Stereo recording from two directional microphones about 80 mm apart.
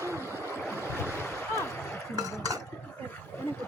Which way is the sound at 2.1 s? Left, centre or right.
Right.